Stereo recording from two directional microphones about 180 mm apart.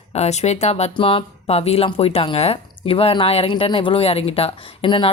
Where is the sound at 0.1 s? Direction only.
35° left (ahead or behind).